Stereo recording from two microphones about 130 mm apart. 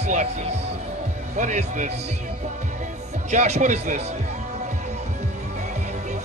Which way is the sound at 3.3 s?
65° right (ahead or behind).